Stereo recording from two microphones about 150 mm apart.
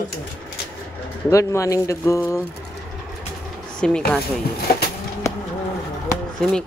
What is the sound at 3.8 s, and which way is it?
Speech, 5° left (ahead or behind).